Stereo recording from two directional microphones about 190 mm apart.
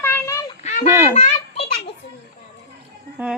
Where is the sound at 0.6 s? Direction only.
35° left (ahead or behind).